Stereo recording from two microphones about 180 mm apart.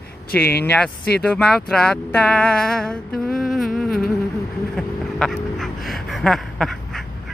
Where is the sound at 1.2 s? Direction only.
5° left (ahead or behind).